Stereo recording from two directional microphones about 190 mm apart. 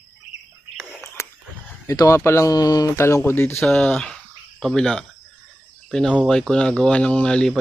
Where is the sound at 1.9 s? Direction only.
15° left (ahead or behind).